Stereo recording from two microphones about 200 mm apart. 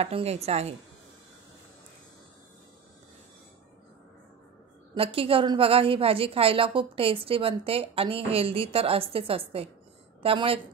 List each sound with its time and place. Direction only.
0.0 s a woman's voice: 30° right (ahead or behind)
4.9 s a woman's voice: 30° right (ahead or behind)